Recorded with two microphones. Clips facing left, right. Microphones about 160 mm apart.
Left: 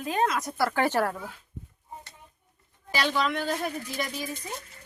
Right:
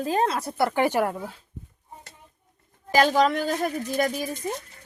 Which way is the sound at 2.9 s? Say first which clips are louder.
Right 7 dB; 45° right (ahead or behind).